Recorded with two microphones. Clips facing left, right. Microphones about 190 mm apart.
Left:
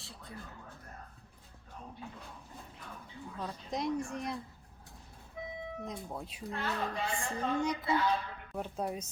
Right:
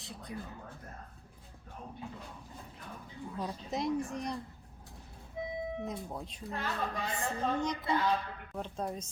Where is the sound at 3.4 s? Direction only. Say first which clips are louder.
Right 1 dB; 10° right (ahead or behind).